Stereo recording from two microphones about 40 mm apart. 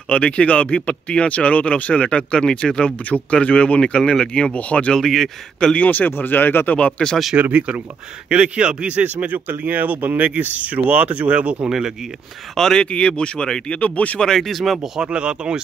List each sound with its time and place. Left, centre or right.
0.1 s speech: left
3.0 s speech: left
4.9 s speech: centre
5.8 s speech: left
7.0 s speech: left
8.3 s speech: right
9.0 s speech: right
11.7 s speech: centre
12.5 s speech: centre
12.8 s speech: left
13.7 s speech: left
14.2 s speech: centre
15.0 s speech: right